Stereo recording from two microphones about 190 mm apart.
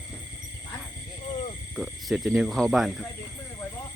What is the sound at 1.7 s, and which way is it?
Speech, centre (ahead or behind).